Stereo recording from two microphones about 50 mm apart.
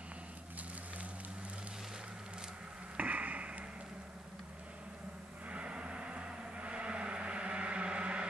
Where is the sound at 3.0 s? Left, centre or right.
Right.